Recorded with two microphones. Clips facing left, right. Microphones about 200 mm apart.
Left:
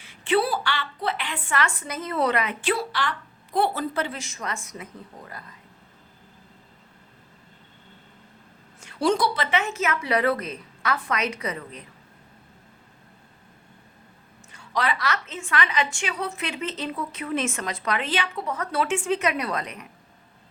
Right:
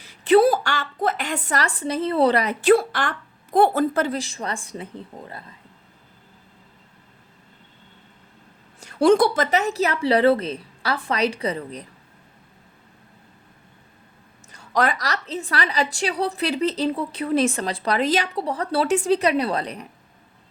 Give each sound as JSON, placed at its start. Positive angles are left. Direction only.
{"t": 0.0, "sound": "a woman's voice", "side_deg": -40}
{"t": 8.8, "sound": "a woman's voice", "side_deg": -45}
{"t": 14.5, "sound": "a woman's voice", "side_deg": -45}